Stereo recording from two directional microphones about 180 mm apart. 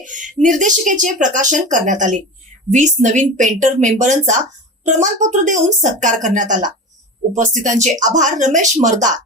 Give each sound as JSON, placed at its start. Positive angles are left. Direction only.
{"t": 0.0, "sound": "speech", "side_deg": -45}